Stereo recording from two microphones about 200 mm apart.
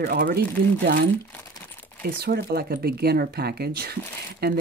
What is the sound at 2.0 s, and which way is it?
Speech, 50° right (ahead or behind).